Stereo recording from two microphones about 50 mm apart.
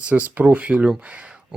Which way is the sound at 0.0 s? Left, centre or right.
Right.